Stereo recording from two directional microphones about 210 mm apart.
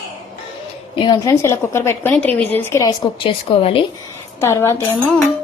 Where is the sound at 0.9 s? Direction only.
20° left (ahead or behind).